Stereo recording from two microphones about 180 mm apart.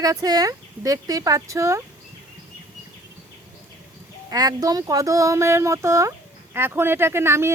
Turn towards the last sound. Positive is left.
turn(degrees=-15)  # may be behind; listen again after turning